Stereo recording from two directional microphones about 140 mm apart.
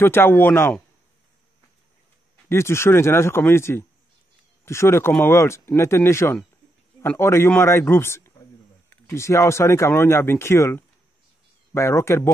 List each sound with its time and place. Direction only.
0.0 s speech: 15° left (ahead or behind)
2.5 s a man's voice: 20° left (ahead or behind)